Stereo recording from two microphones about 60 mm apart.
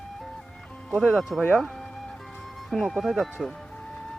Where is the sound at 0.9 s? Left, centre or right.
Centre.